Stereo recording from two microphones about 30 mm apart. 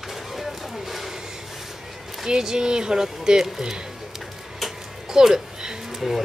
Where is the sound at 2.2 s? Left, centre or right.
Right.